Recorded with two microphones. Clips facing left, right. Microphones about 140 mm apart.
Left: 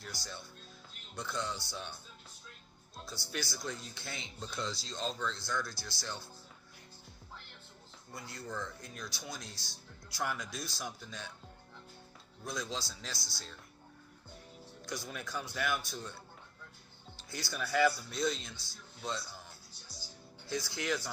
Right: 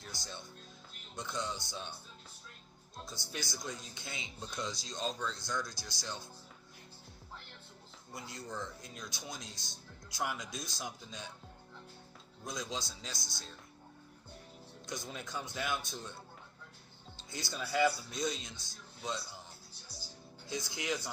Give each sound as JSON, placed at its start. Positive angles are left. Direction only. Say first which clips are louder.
{"t": 0.0, "sound": "speech", "louder": "left 1 dB", "side_deg": -20}
{"t": 3.0, "sound": "speech", "louder": "left 2 dB", "side_deg": -20}
{"t": 8.1, "sound": "speech", "louder": "left 1 dB", "side_deg": -20}
{"t": 12.5, "sound": "speech", "louder": "left 1 dB", "side_deg": -20}
{"t": 14.8, "sound": "speech", "louder": "left 1 dB", "side_deg": -20}
{"t": 17.2, "sound": "speech", "louder": "left 1 dB", "side_deg": -20}
{"t": 20.5, "sound": "speech", "louder": "left 2 dB", "side_deg": -20}